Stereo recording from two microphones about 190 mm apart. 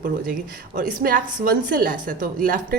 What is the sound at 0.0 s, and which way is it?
A woman's voice, 50° right (ahead or behind).